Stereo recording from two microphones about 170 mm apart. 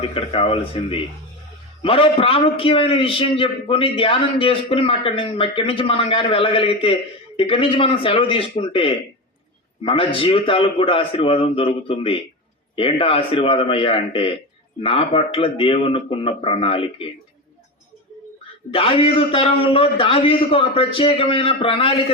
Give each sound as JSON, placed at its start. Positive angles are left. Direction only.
{"t": 0.1, "sound": "a man's voice", "side_deg": 30}
{"t": 18.7, "sound": "a man's voice", "side_deg": 35}